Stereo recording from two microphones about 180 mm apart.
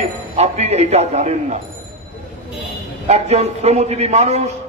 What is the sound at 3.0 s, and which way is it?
A man's voice, 40° right (ahead or behind).